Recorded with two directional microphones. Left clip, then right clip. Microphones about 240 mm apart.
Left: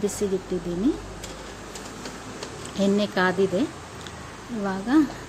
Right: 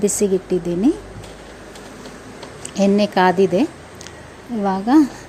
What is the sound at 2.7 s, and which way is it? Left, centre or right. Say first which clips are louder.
Speech: right 7 dB; right.